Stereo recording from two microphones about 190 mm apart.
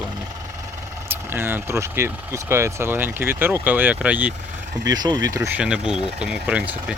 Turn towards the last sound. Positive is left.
turn(degrees=-5)  # may be behind; listen again after turning